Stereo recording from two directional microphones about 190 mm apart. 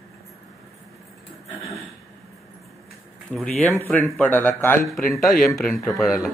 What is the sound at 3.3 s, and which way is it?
A man's voice, 5° left (ahead or behind).